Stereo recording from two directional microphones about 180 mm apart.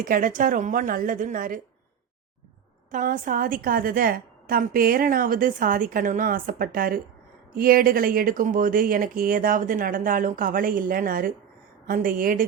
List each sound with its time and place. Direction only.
0.0 s a woman's voice: 50° right (ahead or behind)
2.9 s a woman's voice: 45° right (ahead or behind)